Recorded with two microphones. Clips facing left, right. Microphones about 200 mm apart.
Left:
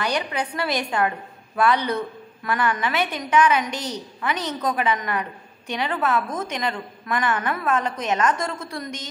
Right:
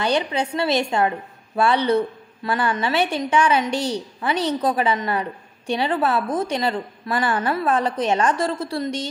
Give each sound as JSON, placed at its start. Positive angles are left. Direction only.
{"t": 0.0, "sound": "a woman's voice", "side_deg": -25}